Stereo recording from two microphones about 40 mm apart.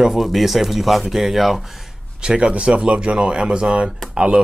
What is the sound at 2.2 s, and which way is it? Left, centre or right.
Speech, centre.